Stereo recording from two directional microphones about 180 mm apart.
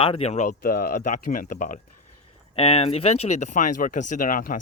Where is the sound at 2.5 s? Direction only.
35° left (ahead or behind).